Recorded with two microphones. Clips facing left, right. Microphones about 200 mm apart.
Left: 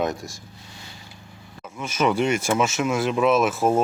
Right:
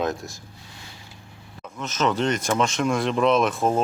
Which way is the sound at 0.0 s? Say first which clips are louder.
Left 1 dB; centre (ahead or behind).